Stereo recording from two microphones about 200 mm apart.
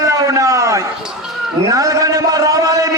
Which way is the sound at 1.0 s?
5° right (ahead or behind).